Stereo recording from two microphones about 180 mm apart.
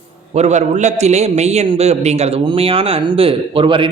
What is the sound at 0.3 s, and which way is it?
A man's voice, 40° right (ahead or behind).